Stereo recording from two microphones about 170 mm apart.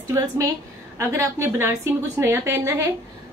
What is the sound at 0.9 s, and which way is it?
A woman's voice, 15° right (ahead or behind).